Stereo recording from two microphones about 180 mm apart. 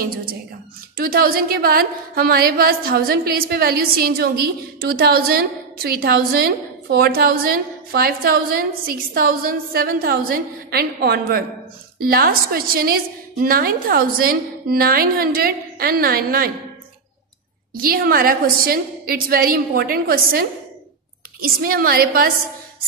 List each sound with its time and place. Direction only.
0.0 s a woman's voice: 55° right (ahead or behind)
17.7 s a woman's voice: 55° right (ahead or behind)